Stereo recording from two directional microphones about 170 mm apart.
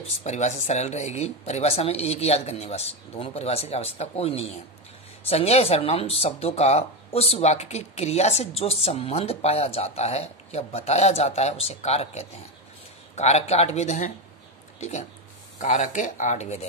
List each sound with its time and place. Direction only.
0.2 s speech: 40° left (ahead or behind)